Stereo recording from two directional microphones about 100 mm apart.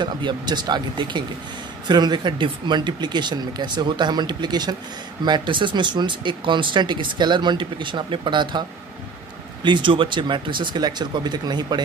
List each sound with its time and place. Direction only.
0.0 s speech: 50° right (ahead or behind)